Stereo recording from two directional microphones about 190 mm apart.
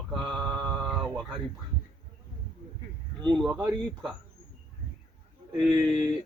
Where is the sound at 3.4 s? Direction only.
5° right (ahead or behind).